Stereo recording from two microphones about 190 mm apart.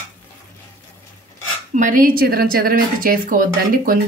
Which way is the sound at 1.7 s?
45° right (ahead or behind).